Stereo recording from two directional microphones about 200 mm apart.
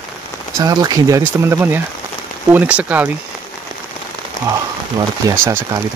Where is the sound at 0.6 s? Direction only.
15° right (ahead or behind).